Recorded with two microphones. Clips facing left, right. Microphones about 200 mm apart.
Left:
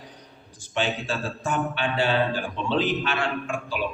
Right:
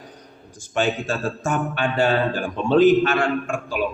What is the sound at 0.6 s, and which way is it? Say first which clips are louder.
A man's voice: right 5 dB; 45° right (ahead or behind).